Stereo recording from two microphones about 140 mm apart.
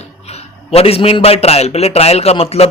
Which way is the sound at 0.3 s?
50° left (ahead or behind).